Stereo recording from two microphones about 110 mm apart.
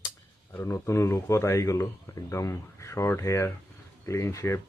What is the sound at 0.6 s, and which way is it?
Speech, 25° left (ahead or behind).